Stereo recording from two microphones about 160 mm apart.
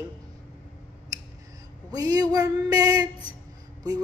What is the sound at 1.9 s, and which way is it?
Music, 25° right (ahead or behind).